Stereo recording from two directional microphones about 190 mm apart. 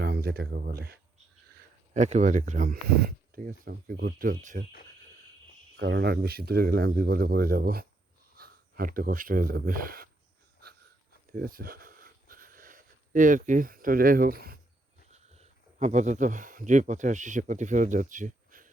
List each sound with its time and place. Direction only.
0.0 s speech: 55° right (ahead or behind)
1.9 s speech: 35° right (ahead or behind)
5.7 s speech: 65° right (ahead or behind); by 10.1 s 50° right (ahead or behind)
11.3 s a sound: 50° right (ahead or behind)
15.1 s speech: 35° right (ahead or behind)